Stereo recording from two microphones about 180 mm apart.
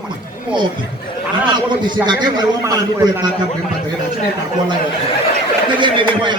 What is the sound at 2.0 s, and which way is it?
A man's voice, 25° right (ahead or behind).